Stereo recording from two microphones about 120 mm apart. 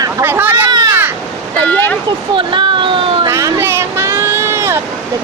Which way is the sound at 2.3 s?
40° right (ahead or behind).